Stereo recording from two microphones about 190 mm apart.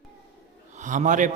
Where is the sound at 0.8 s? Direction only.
40° right (ahead or behind).